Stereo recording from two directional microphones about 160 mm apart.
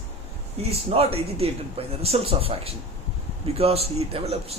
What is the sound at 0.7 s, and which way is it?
Speech, 40° right (ahead or behind).